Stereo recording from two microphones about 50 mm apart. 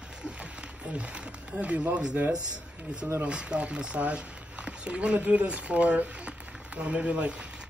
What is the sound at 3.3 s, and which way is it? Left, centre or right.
Speech, right.